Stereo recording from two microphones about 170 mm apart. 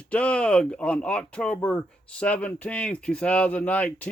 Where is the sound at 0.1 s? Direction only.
5° left (ahead or behind).